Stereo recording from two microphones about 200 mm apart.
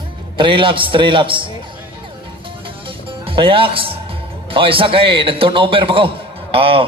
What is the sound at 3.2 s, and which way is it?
A man's voice, 25° right (ahead or behind).